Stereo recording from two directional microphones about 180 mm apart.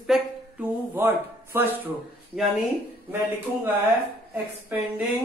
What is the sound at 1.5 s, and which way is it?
Speech, 10° right (ahead or behind).